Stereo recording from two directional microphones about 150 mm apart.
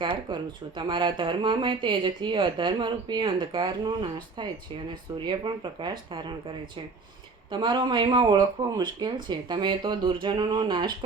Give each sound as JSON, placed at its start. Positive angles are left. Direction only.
{"t": 0.0, "sound": "speech", "side_deg": -30}
{"t": 7.5, "sound": "speech", "side_deg": -30}